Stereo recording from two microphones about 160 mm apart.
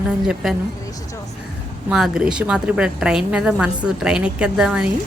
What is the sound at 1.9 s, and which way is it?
A woman's voice, 5° right (ahead or behind).